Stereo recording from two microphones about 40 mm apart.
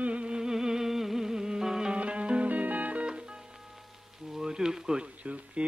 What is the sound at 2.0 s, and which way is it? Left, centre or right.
Music, right.